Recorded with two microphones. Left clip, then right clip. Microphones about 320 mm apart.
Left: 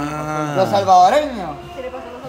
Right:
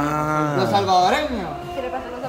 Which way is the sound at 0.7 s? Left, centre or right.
Centre.